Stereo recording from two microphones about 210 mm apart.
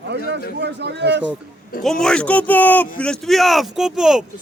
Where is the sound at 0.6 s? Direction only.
55° right (ahead or behind).